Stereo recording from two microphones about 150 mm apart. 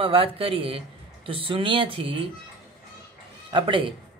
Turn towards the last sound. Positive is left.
turn(degrees=-35)  # may be behind; listen again after turning